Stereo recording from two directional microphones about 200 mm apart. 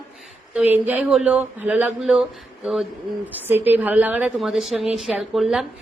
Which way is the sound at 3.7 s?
10° right (ahead or behind).